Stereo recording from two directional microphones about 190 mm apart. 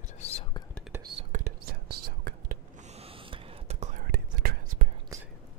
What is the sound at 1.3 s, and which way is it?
Whispering, 40° right (ahead or behind).